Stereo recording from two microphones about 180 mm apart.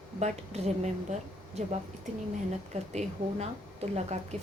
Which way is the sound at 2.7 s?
35° right (ahead or behind).